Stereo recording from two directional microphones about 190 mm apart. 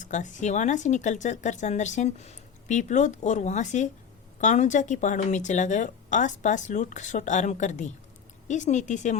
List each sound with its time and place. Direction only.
0.0 s speech: 40° left (ahead or behind)